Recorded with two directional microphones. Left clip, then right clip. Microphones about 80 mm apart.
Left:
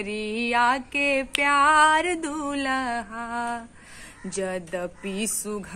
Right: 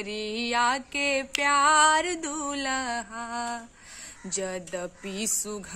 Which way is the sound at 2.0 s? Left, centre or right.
Centre.